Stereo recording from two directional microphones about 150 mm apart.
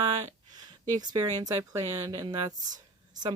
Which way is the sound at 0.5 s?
25° right (ahead or behind).